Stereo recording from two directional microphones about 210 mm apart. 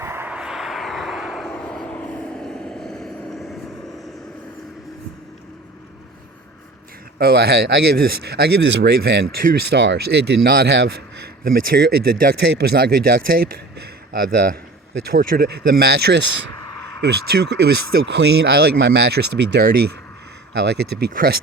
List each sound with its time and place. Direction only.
0.0 s vehicle: 10° right (ahead or behind)
7.2 s speech: 50° right (ahead or behind)